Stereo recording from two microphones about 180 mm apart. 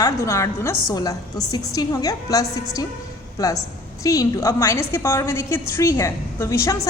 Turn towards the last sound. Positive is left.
turn(degrees=15)  # may be behind; listen again after turning